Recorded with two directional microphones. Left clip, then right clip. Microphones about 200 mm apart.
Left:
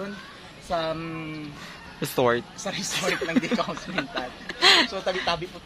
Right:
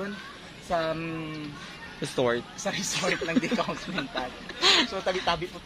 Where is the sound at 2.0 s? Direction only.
25° left (ahead or behind).